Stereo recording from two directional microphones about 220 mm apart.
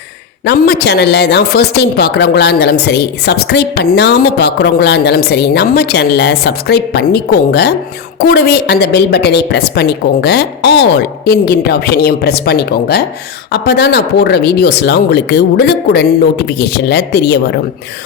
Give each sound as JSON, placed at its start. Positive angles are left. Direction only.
{"t": 0.4, "sound": "speech", "side_deg": 45}